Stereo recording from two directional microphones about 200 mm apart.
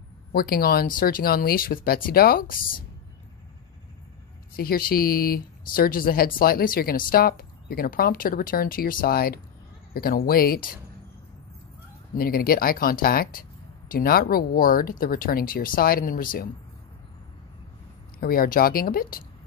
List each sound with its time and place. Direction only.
0.3 s speech: 50° left (ahead or behind)
4.6 s speech: 50° left (ahead or behind)
12.2 s speech: 45° left (ahead or behind)
18.2 s speech: 45° left (ahead or behind)